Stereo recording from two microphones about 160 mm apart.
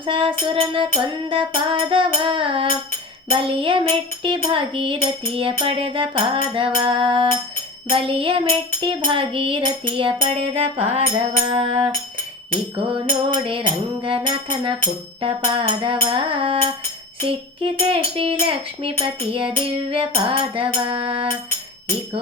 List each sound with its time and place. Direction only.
0.0 s music: 35° right (ahead or behind)
12.7 s music: 30° right (ahead or behind)